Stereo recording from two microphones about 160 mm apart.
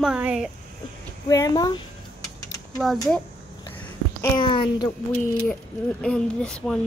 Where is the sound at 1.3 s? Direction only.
25° left (ahead or behind).